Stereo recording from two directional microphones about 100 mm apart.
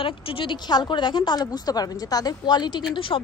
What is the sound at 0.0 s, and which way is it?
A woman's voice, 60° left (ahead or behind).